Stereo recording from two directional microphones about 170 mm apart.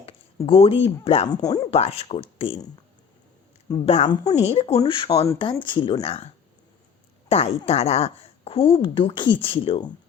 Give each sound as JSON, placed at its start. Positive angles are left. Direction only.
{"t": 0.4, "sound": "a woman's voice", "side_deg": 35}
{"t": 1.3, "sound": "speech", "side_deg": 20}
{"t": 1.7, "sound": "a woman's voice", "side_deg": 40}
{"t": 3.8, "sound": "a woman's voice", "side_deg": 40}
{"t": 4.1, "sound": "speech", "side_deg": 20}
{"t": 4.4, "sound": "a woman's voice", "side_deg": 35}
{"t": 7.3, "sound": "a woman's voice", "side_deg": 35}